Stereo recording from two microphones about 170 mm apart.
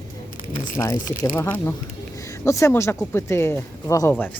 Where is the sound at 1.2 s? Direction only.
10° left (ahead or behind).